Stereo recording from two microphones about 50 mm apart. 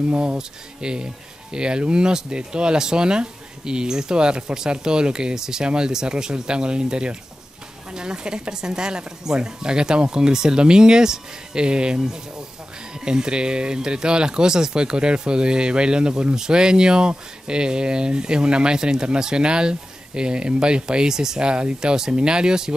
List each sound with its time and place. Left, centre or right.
0.1 s speech: right